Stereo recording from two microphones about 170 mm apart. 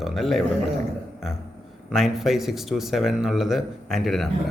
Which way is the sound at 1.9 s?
Centre (ahead or behind).